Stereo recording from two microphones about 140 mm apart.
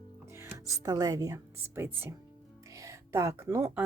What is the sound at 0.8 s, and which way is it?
Speech, 25° right (ahead or behind).